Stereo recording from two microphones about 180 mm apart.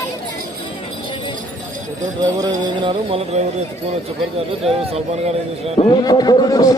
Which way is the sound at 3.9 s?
35° right (ahead or behind).